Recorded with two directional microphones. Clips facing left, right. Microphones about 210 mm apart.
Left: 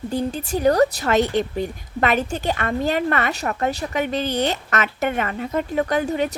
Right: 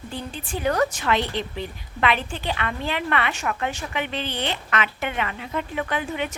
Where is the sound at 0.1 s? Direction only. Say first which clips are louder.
Left 8 dB; 40° left (ahead or behind).